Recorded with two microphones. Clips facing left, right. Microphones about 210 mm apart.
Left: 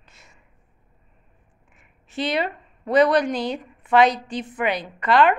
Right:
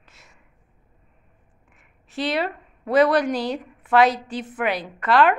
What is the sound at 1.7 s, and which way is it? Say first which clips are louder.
A woman's voice: left 1 dB; centre (ahead or behind).